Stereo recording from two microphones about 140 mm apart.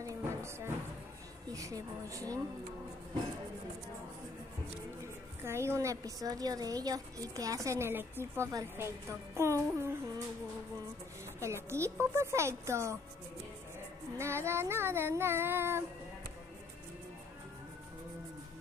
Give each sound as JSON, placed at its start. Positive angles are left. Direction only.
{"t": 0.0, "sound": "music", "side_deg": -20}
{"t": 1.5, "sound": "a woman's voice", "side_deg": -25}
{"t": 5.0, "sound": "a woman's voice", "side_deg": -20}
{"t": 11.3, "sound": "a woman's voice", "side_deg": -20}
{"t": 14.1, "sound": "child singing", "side_deg": -20}